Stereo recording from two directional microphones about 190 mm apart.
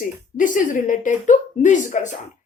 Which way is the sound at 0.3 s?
45° left (ahead or behind).